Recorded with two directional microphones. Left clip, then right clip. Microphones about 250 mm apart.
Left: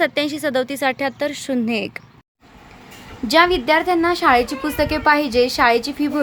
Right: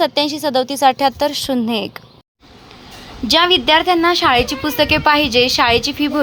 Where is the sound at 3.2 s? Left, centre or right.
Centre.